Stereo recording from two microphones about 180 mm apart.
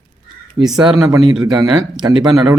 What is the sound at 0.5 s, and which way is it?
Speech, 20° right (ahead or behind).